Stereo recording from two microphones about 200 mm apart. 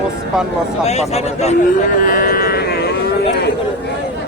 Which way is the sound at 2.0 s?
45° left (ahead or behind).